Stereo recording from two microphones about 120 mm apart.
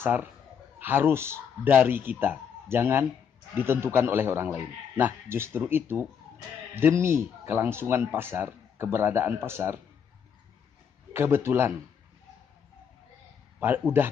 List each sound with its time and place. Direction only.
0.0 s a man's voice: 15° right (ahead or behind)
11.1 s speech: 20° right (ahead or behind)
13.6 s a man's voice: 20° right (ahead or behind)